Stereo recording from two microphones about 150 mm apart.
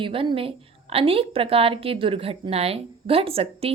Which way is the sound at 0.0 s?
35° right (ahead or behind).